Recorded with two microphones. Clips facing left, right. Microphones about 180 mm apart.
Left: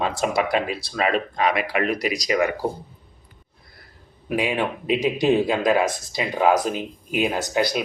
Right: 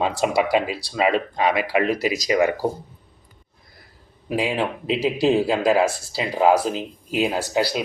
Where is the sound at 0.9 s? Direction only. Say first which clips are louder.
Right 2 dB; 15° right (ahead or behind).